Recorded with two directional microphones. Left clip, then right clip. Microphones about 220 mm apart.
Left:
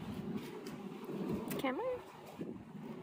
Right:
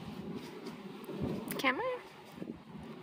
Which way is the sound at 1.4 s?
Centre (ahead or behind).